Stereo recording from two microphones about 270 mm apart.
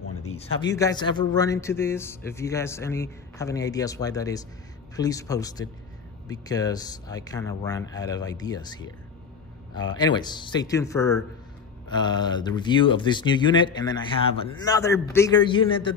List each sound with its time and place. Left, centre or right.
0.6 s speech: centre